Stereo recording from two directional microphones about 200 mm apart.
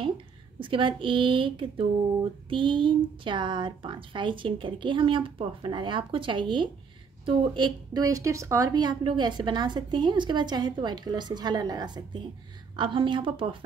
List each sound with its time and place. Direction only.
0.6 s speech: 25° right (ahead or behind)